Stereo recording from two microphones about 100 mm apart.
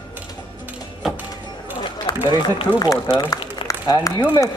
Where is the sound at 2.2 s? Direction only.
50° left (ahead or behind).